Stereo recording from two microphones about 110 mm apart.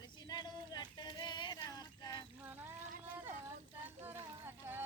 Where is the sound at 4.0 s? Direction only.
20° right (ahead or behind).